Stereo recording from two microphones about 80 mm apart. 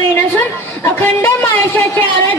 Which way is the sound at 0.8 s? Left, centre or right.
Left.